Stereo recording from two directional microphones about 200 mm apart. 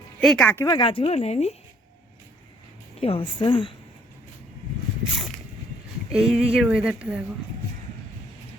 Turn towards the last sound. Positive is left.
turn(degrees=-5)  # may be behind; listen again after turning